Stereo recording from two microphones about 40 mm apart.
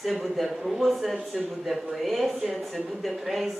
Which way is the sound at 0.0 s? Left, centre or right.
Centre.